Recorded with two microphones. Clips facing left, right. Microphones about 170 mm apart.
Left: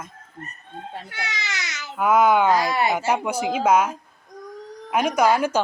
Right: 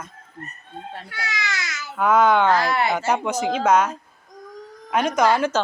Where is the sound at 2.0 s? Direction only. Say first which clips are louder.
Even; 10° left (ahead or behind).